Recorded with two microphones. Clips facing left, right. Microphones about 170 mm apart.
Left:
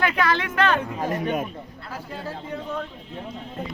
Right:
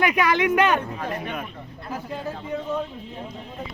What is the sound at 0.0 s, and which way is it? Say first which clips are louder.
Speech: right 3 dB; 15° right (ahead or behind).